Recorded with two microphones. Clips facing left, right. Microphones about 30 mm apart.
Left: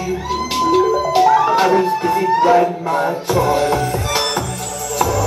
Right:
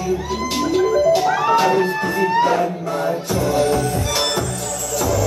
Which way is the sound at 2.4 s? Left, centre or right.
Centre.